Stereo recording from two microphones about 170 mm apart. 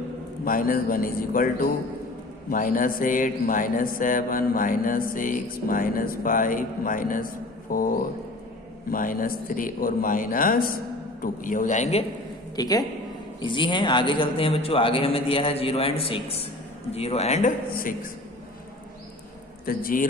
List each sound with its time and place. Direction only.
0.5 s a man's voice: 55° left (ahead or behind)
2.5 s a sound: 55° left (ahead or behind)
8.9 s a man's voice: 55° left (ahead or behind)
12.5 s a man's voice: 20° left (ahead or behind); by 17.5 s 40° left (ahead or behind)
17.6 s a man's voice: 55° left (ahead or behind)
19.6 s a man's voice: 55° left (ahead or behind)